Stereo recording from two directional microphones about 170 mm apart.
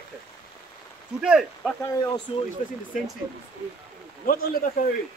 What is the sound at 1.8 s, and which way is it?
Speech, 20° left (ahead or behind).